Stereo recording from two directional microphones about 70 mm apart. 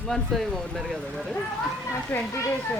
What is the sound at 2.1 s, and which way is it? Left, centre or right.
Speech, left.